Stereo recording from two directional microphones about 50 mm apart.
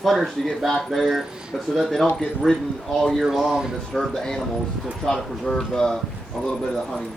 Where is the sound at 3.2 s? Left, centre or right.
Centre.